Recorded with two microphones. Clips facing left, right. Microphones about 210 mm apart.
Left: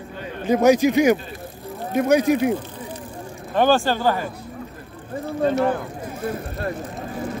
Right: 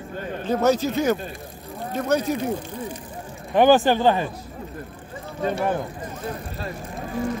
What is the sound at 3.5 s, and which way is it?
Speech, 15° right (ahead or behind).